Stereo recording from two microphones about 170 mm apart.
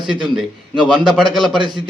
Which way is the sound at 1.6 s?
25° right (ahead or behind).